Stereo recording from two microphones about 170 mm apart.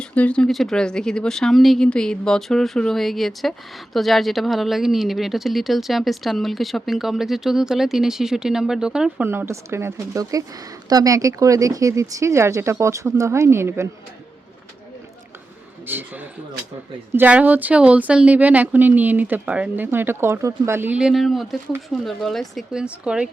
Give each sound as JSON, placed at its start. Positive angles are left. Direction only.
{"t": 0.0, "sound": "speech", "side_deg": 5}
{"t": 15.9, "sound": "speech", "side_deg": -10}